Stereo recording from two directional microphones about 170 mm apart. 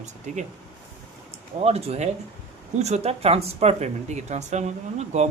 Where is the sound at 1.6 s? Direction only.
35° right (ahead or behind).